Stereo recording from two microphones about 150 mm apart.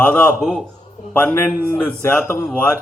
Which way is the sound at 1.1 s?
10° left (ahead or behind).